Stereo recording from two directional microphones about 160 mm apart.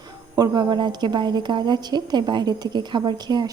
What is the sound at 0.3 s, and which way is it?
A woman's voice, 25° right (ahead or behind).